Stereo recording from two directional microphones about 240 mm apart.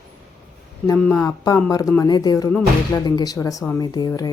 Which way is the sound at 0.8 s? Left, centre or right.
Centre.